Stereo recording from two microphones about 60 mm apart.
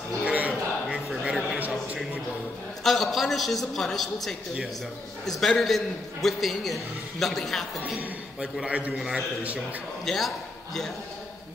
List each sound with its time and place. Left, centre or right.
0.2 s a sound: right
2.8 s a woman's voice: centre
5.4 s a woman's voice: centre
8.4 s a man's voice: centre
10.0 s a man's voice: centre